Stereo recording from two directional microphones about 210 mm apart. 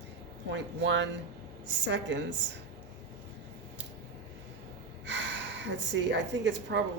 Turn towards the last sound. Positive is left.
turn(degrees=-55)  # may be behind; listen again after turning